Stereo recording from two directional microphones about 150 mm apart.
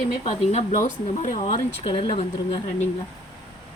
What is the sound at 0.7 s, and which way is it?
Speech, 55° left (ahead or behind).